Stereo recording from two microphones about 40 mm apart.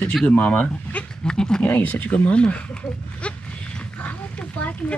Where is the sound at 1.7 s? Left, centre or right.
Left.